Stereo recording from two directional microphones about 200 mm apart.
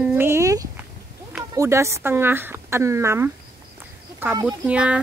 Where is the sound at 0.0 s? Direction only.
10° right (ahead or behind).